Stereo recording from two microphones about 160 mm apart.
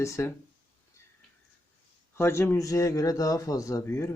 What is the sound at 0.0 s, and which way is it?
Speech, 20° left (ahead or behind).